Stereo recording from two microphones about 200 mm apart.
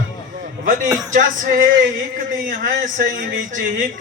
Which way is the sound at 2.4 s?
45° right (ahead or behind).